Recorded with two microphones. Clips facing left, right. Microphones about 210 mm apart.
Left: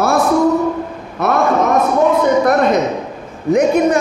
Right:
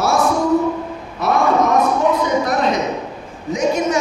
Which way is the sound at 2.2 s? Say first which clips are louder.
Left 5 dB; 55° left (ahead or behind).